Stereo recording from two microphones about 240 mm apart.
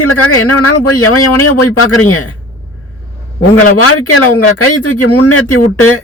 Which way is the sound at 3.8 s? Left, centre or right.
Left.